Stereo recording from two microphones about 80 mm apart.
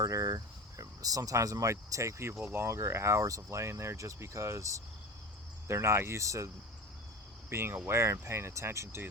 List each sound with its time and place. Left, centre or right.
0.0 s speech: right
7.5 s speech: right